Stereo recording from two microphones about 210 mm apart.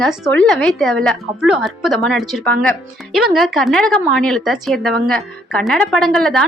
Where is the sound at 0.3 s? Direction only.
5° left (ahead or behind).